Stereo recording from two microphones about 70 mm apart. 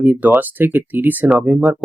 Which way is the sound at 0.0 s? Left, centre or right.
Right.